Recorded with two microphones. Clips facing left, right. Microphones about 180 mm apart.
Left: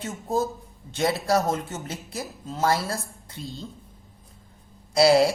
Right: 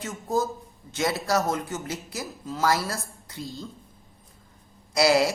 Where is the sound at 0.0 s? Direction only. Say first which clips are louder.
Left 1 dB; 30° left (ahead or behind).